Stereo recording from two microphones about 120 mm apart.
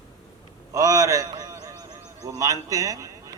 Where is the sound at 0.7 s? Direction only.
30° right (ahead or behind).